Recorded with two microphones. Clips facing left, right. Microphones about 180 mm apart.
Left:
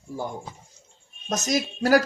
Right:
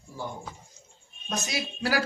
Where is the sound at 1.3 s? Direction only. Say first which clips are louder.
Left 7 dB; 45° left (ahead or behind).